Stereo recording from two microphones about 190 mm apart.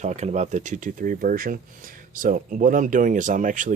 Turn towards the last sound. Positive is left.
turn(degrees=-40)  # may be behind; listen again after turning